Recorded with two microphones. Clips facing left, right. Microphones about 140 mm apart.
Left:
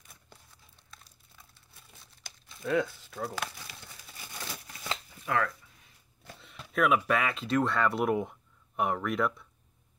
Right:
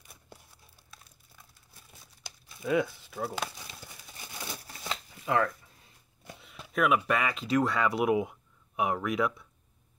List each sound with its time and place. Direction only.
0.1 s crumpling: 10° right (ahead or behind)
2.4 s speech: 10° right (ahead or behind)
3.1 s speech: 5° right (ahead or behind)
3.4 s crumpling: 15° right (ahead or behind)
6.4 s speech: centre (ahead or behind)